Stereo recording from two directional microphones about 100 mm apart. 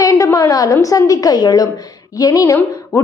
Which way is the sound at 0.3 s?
35° left (ahead or behind).